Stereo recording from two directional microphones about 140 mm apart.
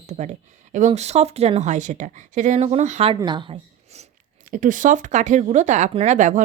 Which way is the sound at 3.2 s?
35° right (ahead or behind).